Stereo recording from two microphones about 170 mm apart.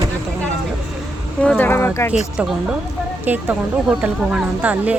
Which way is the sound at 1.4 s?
10° left (ahead or behind).